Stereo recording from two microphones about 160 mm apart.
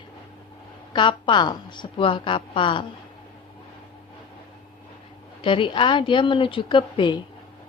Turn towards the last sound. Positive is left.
turn(degrees=30)  # may be behind; listen again after turning